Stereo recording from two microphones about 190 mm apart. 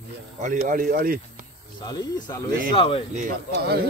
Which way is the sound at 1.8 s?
20° left (ahead or behind).